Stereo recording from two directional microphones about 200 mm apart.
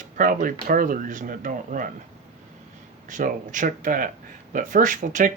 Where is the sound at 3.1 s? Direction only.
40° right (ahead or behind).